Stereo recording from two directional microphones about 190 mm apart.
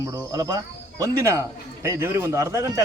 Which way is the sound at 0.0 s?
20° right (ahead or behind).